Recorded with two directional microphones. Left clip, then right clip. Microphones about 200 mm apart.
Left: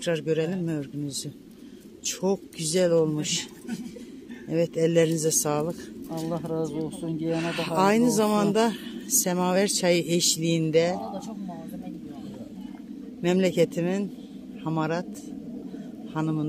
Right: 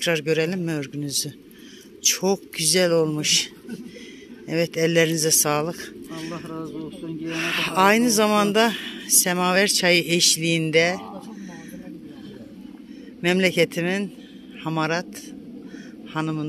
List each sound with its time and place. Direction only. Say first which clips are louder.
0.0 s a man's voice: right 4 dB; 10° right (ahead or behind)
4.5 s speech: right 2 dB; centre (ahead or behind)
6.3 s speech: left 8 dB; 55° left (ahead or behind)
7.2 s speech: right 4 dB; centre (ahead or behind)
13.2 s speech: right 3 dB; centre (ahead or behind)
16.1 s a man's voice: right 2 dB; centre (ahead or behind)